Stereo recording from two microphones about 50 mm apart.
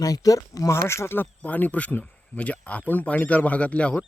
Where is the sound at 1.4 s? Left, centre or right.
Left.